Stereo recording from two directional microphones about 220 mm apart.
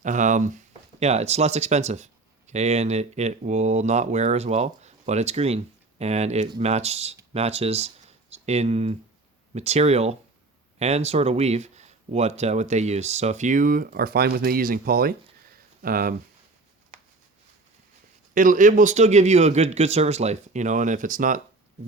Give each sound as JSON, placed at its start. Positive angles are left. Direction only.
{"t": 0.0, "sound": "speech", "side_deg": -35}
{"t": 18.3, "sound": "speech", "side_deg": -35}